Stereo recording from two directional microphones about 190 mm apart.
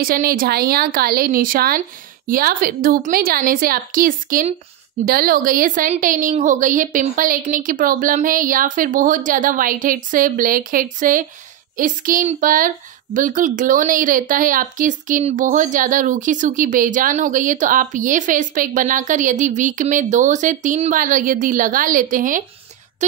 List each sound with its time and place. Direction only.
0.0 s speech: 50° right (ahead or behind)